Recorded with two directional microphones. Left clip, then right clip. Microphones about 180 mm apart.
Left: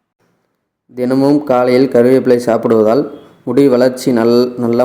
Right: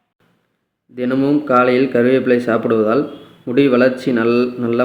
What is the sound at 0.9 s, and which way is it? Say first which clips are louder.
Speech: left 5 dB; 30° left (ahead or behind).